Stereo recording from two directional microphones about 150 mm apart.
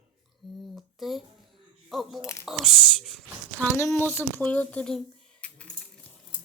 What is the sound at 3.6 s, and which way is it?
Speech, 15° left (ahead or behind).